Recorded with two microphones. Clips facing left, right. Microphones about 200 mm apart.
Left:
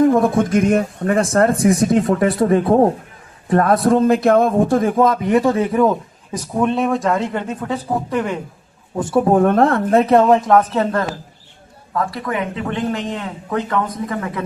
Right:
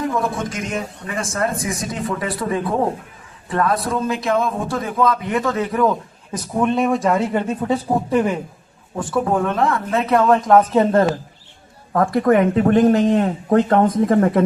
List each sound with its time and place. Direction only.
0.0 s a man's voice: 50° left (ahead or behind)
2.5 s a man's voice: 45° left (ahead or behind)
6.5 s speech: centre (ahead or behind)
7.6 s speech: 15° right (ahead or behind)
9.0 s speech: 25° left (ahead or behind)
9.3 s a man's voice: 50° left (ahead or behind)
9.9 s speech: 35° left (ahead or behind)
10.2 s speech: 15° left (ahead or behind)
10.6 s speech: 15° right (ahead or behind)
11.9 s speech: 45° right (ahead or behind)